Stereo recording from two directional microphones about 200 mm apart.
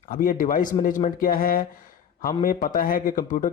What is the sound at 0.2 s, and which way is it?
Speech, 45° left (ahead or behind).